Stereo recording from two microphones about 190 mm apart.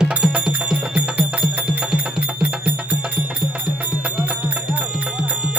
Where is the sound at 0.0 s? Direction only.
5° right (ahead or behind).